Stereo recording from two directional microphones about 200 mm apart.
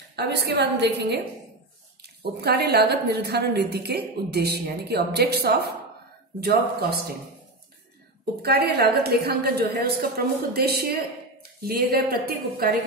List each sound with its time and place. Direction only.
0.1 s a woman's voice: 55° right (ahead or behind)
8.4 s a woman's voice: 50° right (ahead or behind)